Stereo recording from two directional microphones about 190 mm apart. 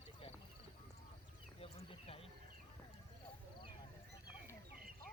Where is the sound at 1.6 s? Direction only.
30° left (ahead or behind).